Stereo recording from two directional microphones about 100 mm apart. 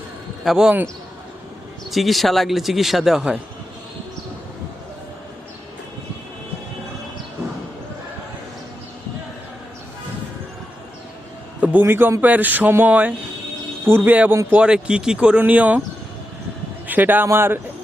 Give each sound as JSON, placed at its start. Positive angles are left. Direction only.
{"t": 0.4, "sound": "speech", "side_deg": -5}
{"t": 1.9, "sound": "speech", "side_deg": 0}
{"t": 11.6, "sound": "speech", "side_deg": -20}
{"t": 16.8, "sound": "a man's voice", "side_deg": -20}